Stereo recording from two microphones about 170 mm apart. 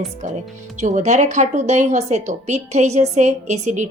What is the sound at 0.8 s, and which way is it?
A woman's voice, 45° right (ahead or behind).